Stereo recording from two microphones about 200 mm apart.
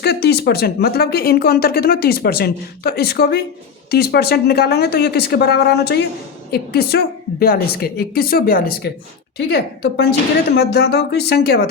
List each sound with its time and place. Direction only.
0.0 s speech: 55° left (ahead or behind)